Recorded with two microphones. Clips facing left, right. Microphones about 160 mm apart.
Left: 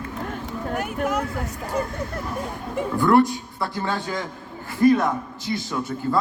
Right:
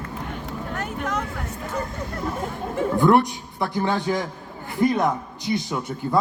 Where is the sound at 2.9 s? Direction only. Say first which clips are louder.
Left 1 dB; 20° right (ahead or behind).